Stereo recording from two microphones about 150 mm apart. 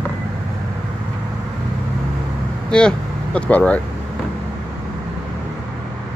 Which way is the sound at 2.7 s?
5° left (ahead or behind).